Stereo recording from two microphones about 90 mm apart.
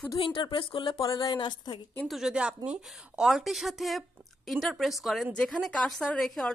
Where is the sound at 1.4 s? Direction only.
55° left (ahead or behind).